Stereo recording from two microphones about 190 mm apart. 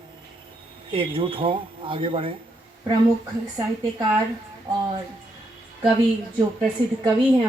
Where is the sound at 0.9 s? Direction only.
25° right (ahead or behind).